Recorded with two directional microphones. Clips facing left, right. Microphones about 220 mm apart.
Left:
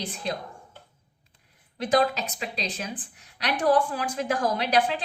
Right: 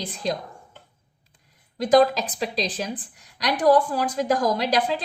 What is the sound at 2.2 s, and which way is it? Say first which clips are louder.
Speech: right 6 dB; 35° right (ahead or behind).